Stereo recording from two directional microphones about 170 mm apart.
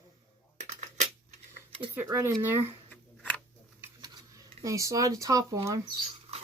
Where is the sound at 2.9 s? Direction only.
10° left (ahead or behind).